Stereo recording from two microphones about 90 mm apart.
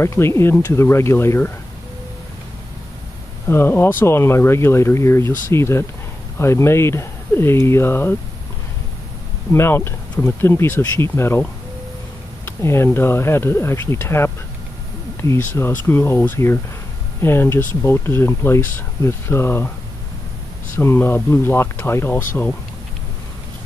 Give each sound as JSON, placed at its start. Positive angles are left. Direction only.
{"t": 0.0, "sound": "speech", "side_deg": 30}
{"t": 3.4, "sound": "speech", "side_deg": 25}
{"t": 9.5, "sound": "speech", "side_deg": 25}
{"t": 12.4, "sound": "speech", "side_deg": 30}
{"t": 20.7, "sound": "speech", "side_deg": 30}